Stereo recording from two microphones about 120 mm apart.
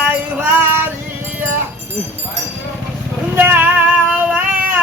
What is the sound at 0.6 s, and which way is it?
Music, 20° right (ahead or behind).